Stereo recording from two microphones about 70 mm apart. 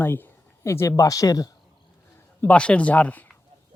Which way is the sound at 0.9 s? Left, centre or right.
Left.